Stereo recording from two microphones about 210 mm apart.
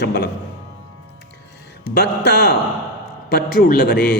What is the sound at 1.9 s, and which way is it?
A man's voice, 50° left (ahead or behind).